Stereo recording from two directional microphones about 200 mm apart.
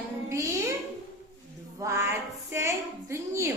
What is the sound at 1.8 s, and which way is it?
A woman's voice, 15° right (ahead or behind).